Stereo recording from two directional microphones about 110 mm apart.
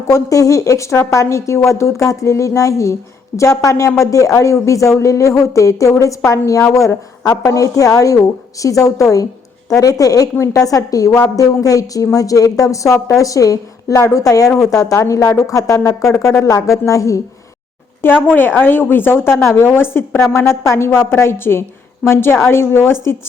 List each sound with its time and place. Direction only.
0.1 s a woman's voice: 30° left (ahead or behind)
18.0 s a woman's voice: 20° left (ahead or behind)